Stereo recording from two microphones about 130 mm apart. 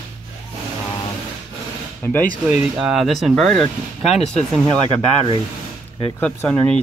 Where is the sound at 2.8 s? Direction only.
Centre (ahead or behind).